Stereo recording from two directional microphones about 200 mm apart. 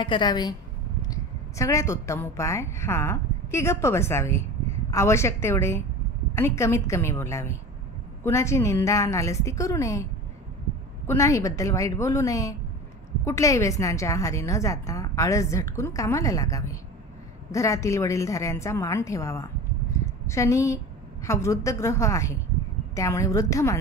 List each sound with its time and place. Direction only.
0.0 s a woman's voice: 25° left (ahead or behind)
11.1 s a woman's voice: 15° left (ahead or behind)